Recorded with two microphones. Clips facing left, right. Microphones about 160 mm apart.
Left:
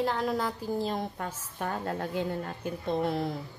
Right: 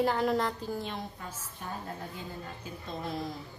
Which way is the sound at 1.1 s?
70° left (ahead or behind).